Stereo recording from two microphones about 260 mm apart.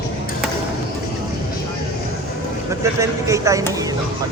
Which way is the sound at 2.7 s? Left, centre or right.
Centre.